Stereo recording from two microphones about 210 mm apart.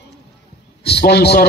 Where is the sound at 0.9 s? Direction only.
50° left (ahead or behind).